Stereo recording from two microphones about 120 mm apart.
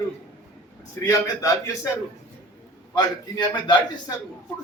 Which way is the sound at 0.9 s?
25° left (ahead or behind).